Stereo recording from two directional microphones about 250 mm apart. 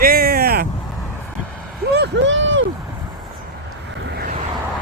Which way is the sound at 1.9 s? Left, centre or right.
Right.